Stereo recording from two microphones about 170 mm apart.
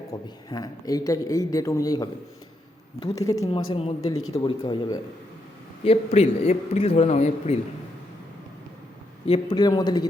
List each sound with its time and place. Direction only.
0.1 s speech: 25° left (ahead or behind)
3.2 s speech: 20° left (ahead or behind)
3.5 s a man's voice: 35° left (ahead or behind)
4.6 s speech: 20° left (ahead or behind)
5.8 s a man's voice: 35° left (ahead or behind)
9.2 s speech: 30° left (ahead or behind)